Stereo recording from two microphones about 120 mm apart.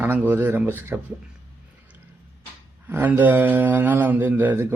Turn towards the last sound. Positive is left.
turn(degrees=-15)  # may be behind; listen again after turning